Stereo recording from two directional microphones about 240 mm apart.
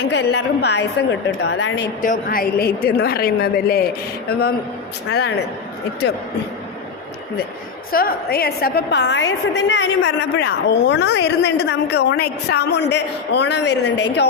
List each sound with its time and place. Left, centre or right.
0.0 s a woman's voice: left
7.9 s a woman's voice: left